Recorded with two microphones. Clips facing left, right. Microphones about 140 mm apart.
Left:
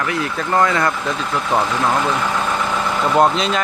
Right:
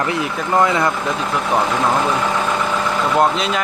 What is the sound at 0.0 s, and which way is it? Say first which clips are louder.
Speech: right 1 dB; 25° right (ahead or behind).